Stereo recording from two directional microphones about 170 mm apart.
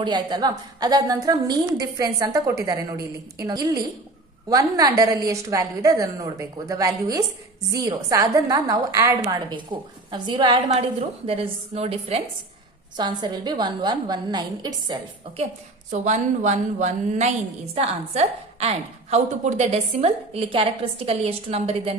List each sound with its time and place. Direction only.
0.0 s a woman's voice: 25° right (ahead or behind)
12.9 s a woman's voice: 25° right (ahead or behind)
15.9 s a woman's voice: 45° right (ahead or behind)